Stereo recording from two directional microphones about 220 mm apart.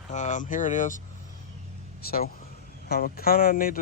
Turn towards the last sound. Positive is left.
turn(degrees=40)  # may be behind; listen again after turning